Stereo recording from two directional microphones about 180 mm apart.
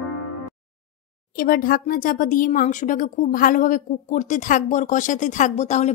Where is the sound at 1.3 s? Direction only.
55° left (ahead or behind).